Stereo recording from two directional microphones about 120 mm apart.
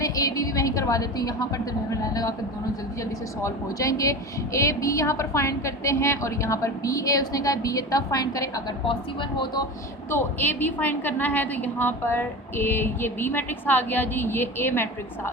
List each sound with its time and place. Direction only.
0.0 s a woman's voice: 30° left (ahead or behind)
10.1 s a woman's voice: 20° left (ahead or behind)